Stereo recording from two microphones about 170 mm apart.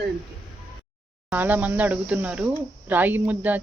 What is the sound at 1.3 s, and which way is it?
Speech, 10° right (ahead or behind).